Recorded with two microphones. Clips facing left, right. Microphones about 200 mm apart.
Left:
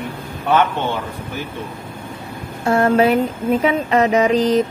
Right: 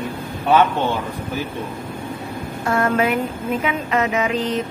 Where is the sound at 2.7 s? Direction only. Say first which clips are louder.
Left 5 dB; 30° left (ahead or behind).